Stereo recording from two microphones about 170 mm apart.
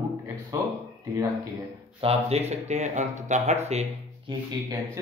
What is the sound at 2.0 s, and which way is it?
Speech, 35° right (ahead or behind).